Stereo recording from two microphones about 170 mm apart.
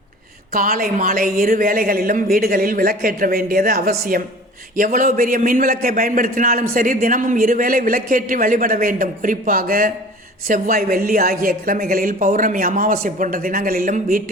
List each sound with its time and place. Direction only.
0.5 s a man's voice: 55° right (ahead or behind)